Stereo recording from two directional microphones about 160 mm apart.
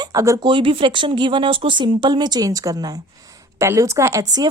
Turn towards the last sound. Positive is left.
turn(degrees=-25)  # may be behind; listen again after turning